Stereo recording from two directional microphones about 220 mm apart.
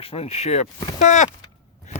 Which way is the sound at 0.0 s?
25° left (ahead or behind).